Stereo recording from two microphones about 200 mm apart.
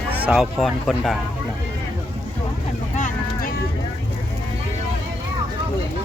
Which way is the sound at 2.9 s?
40° left (ahead or behind).